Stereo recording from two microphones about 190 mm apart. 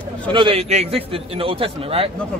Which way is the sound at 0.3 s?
25° right (ahead or behind).